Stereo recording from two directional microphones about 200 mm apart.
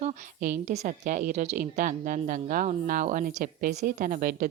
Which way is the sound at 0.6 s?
35° right (ahead or behind).